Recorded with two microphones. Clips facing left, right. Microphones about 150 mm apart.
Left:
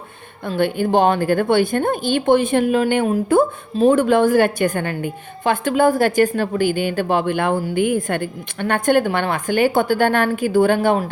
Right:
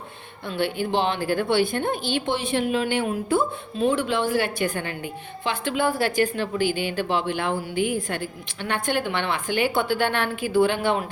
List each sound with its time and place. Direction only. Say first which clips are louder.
0.4 s a woman's voice: left 6 dB; 50° left (ahead or behind)